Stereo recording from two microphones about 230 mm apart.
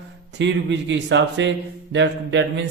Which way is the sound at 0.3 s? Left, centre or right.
Right.